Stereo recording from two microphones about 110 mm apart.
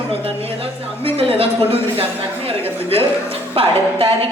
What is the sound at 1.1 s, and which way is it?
A woman's voice, 60° right (ahead or behind).